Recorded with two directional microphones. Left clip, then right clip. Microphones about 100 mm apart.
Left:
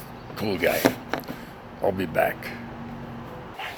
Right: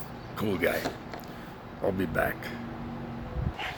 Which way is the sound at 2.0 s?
35° right (ahead or behind).